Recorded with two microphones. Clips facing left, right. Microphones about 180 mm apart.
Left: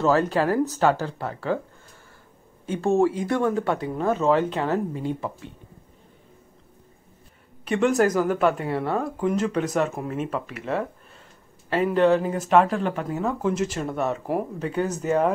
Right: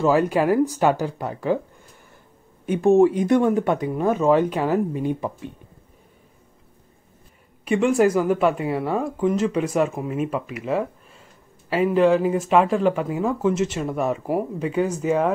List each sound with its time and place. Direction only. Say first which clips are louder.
0.0 s speech: right 2 dB; 10° right (ahead or behind)
2.6 s speech: right 5 dB; 15° right (ahead or behind)
7.6 s speech: right 2 dB; 10° right (ahead or behind)